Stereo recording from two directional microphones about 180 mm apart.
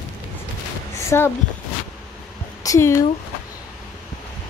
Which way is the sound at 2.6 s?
15° left (ahead or behind).